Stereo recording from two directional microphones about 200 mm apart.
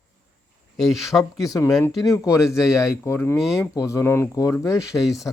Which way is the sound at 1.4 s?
15° left (ahead or behind).